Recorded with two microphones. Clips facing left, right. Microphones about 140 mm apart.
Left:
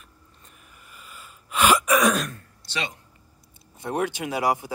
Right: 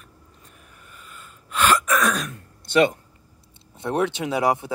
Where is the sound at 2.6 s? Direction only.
50° right (ahead or behind).